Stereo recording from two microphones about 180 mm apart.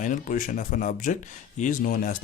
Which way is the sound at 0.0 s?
45° left (ahead or behind).